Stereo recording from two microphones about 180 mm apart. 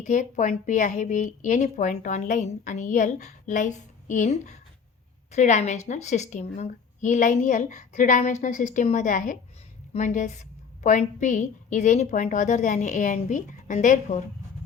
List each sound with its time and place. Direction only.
0.0 s a woman's voice: 45° left (ahead or behind)